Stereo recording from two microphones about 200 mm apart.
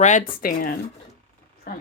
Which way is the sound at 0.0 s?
40° left (ahead or behind).